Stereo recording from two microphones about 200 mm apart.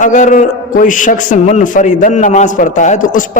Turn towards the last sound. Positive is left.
turn(degrees=40)  # may be behind; listen again after turning